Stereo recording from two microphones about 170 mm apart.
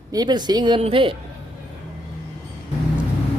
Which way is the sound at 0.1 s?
25° right (ahead or behind).